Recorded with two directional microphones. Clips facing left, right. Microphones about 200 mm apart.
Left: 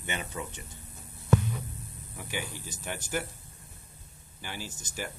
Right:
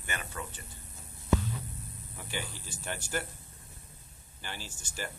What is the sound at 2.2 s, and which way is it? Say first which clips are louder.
Speech: left 3 dB; 10° left (ahead or behind).